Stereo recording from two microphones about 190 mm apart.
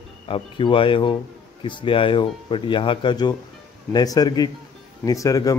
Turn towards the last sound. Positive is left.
turn(degrees=15)  # may be behind; listen again after turning